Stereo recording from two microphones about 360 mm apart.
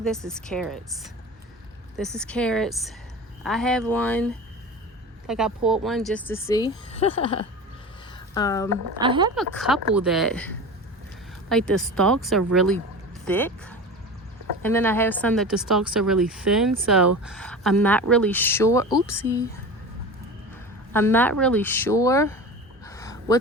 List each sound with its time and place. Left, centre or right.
0.0 s speech: centre
5.3 s speech: centre
9.0 s speech: centre
9.3 s speech: centre
20.9 s speech: centre
22.8 s a sound: centre